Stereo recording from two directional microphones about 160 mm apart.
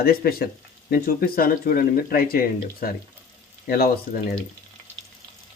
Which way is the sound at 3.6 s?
70° left (ahead or behind).